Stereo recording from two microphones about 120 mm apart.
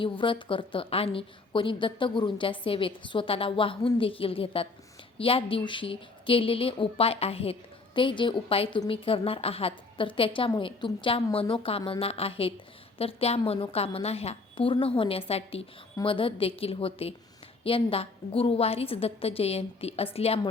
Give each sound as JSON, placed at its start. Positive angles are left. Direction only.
{"t": 0.0, "sound": "a woman's voice", "side_deg": 45}
{"t": 7.9, "sound": "a woman's voice", "side_deg": 45}